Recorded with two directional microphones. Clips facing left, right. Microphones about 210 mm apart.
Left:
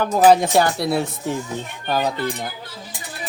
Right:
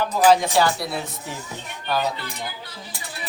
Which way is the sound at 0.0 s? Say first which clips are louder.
Left 3 dB; 50° left (ahead or behind).